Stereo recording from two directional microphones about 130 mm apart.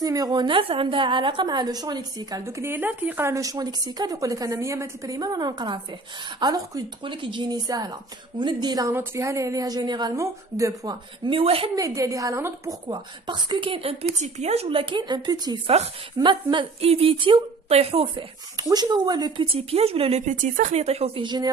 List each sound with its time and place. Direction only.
0.0 s a woman's voice: 30° right (ahead or behind)
11.2 s speech: 45° right (ahead or behind)
11.7 s a woman's voice: 25° right (ahead or behind)
12.8 s a woman's voice: 35° right (ahead or behind)
18.6 s speech: 30° right (ahead or behind)